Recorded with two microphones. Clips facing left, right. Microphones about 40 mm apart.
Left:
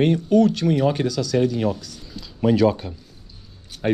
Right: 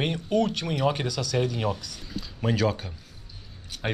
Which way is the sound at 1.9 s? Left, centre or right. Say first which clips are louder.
Left 5 dB; right.